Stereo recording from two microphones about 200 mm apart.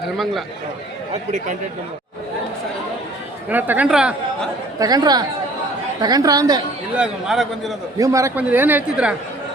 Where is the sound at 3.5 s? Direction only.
10° right (ahead or behind).